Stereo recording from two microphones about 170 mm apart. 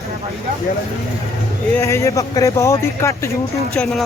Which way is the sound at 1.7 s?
15° left (ahead or behind).